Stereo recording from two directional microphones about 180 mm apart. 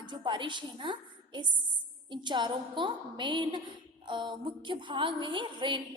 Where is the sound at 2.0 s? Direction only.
25° right (ahead or behind).